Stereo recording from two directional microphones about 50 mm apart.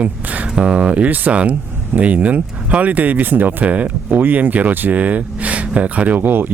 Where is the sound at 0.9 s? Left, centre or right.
Right.